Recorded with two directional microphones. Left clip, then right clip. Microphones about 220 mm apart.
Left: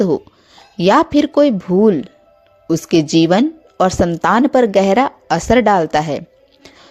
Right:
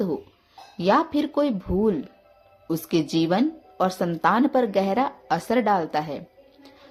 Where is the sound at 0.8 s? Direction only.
35° left (ahead or behind).